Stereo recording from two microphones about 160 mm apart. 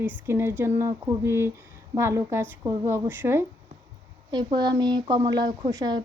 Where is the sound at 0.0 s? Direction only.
15° right (ahead or behind).